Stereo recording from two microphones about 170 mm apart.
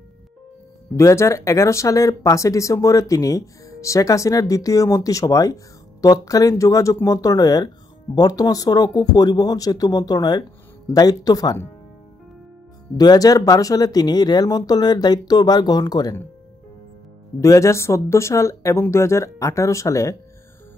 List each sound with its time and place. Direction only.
0.9 s speech: 15° left (ahead or behind)
12.9 s speech: 25° left (ahead or behind)
17.4 s speech: 15° left (ahead or behind)